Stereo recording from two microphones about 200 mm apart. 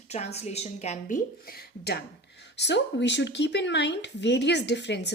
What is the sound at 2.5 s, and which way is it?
Speech, 60° left (ahead or behind).